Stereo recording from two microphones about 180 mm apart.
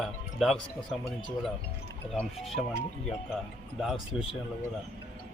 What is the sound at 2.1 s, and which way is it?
Speech, centre (ahead or behind).